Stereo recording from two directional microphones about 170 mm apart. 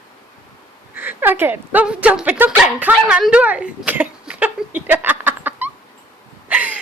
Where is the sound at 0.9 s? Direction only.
10° right (ahead or behind).